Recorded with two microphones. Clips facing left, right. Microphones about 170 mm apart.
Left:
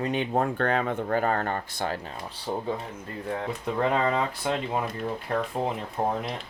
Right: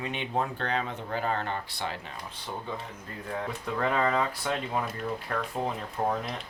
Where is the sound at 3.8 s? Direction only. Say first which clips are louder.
Left 2 dB; 25° left (ahead or behind).